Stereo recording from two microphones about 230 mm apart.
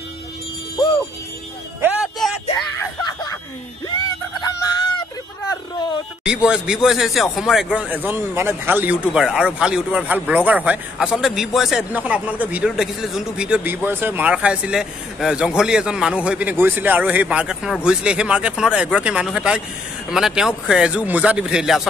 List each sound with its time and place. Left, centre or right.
1.8 s music: centre
2.8 s music: centre
4.5 s fowl: centre
6.2 s speech: centre